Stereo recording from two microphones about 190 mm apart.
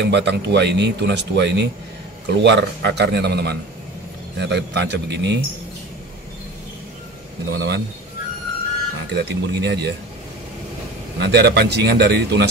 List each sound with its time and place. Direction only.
0.0 s speech: 65° right (ahead or behind)
7.5 s speech: 60° right (ahead or behind)
9.1 s speech: 60° right (ahead or behind)
11.1 s speech: 60° right (ahead or behind)